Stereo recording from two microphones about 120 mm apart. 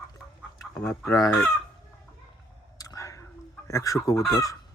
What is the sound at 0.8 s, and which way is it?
Chicken, 5° left (ahead or behind).